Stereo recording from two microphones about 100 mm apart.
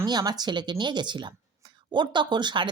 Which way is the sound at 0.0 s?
45° right (ahead or behind).